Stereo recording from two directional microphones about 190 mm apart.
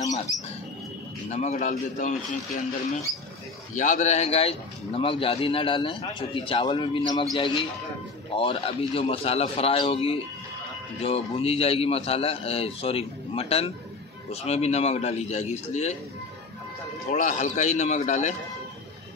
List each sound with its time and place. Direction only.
1.3 s a man's voice: 35° left (ahead or behind)
8.4 s a man's voice: 30° left (ahead or behind)
17.1 s a man's voice: 40° left (ahead or behind)